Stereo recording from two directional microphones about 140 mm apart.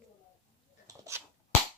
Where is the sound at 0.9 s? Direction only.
20° right (ahead or behind).